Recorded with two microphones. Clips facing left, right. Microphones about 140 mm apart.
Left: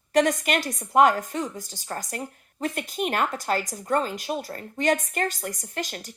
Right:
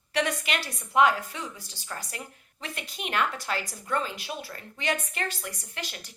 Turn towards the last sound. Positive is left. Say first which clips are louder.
# left 7 dB
turn(degrees=45)  # may be behind; listen again after turning